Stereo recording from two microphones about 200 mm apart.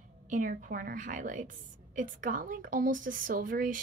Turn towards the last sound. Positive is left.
turn(degrees=-40)  # may be behind; listen again after turning